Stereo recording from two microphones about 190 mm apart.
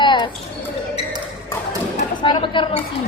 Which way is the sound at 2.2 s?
25° left (ahead or behind).